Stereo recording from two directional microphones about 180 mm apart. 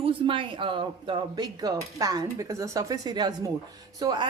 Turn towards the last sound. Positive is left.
turn(degrees=-20)  # may be behind; listen again after turning